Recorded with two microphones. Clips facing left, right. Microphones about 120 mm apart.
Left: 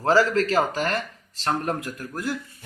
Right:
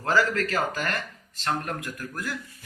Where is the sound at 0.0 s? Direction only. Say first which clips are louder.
Left 5 dB; 35° left (ahead or behind).